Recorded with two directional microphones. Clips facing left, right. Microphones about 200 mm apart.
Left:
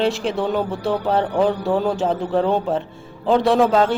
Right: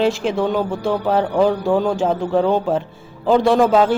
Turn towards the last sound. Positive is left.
turn(degrees=-5)  # may be behind; listen again after turning